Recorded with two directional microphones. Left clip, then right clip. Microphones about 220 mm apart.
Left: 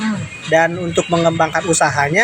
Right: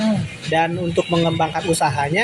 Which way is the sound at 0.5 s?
15° left (ahead or behind).